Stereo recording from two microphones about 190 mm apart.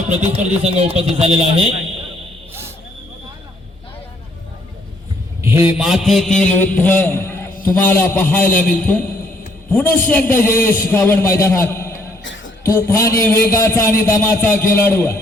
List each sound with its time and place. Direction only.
0.1 s speech: 35° right (ahead or behind)
5.4 s a man's voice: 10° right (ahead or behind); by 15.2 s 10° left (ahead or behind)